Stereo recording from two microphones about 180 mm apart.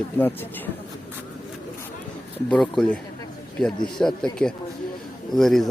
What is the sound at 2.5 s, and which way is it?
Speech, 5° left (ahead or behind).